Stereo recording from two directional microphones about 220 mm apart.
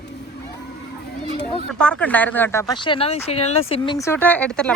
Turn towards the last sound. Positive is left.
turn(degrees=5)  # may be behind; listen again after turning